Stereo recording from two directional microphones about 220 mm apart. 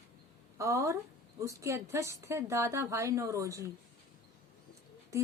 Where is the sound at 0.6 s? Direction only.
15° right (ahead or behind).